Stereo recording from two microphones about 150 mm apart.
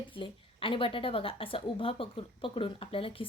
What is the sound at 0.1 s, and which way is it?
A woman's voice, 35° left (ahead or behind).